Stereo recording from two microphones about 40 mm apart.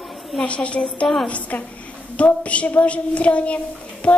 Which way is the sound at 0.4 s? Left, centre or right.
Left.